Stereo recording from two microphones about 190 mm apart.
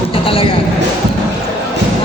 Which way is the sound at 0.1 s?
30° left (ahead or behind).